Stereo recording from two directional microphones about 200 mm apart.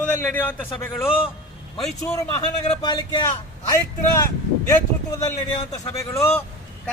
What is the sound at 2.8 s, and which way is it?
Speech, 20° left (ahead or behind).